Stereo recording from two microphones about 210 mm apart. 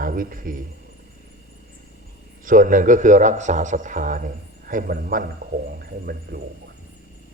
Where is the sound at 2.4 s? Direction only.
40° right (ahead or behind).